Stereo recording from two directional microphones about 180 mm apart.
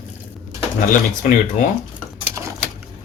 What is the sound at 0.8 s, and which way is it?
Speech, 50° left (ahead or behind).